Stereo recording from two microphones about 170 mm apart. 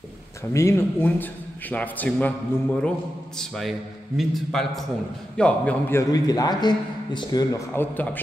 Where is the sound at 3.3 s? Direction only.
Centre (ahead or behind).